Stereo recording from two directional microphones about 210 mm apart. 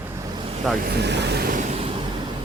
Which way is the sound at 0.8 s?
55° right (ahead or behind).